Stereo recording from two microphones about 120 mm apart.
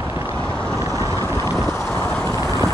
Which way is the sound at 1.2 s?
25° left (ahead or behind).